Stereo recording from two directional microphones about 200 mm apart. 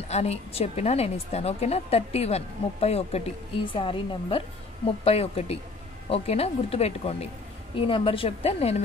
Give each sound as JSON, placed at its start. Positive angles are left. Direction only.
{"t": 0.1, "sound": "a woman's voice", "side_deg": 30}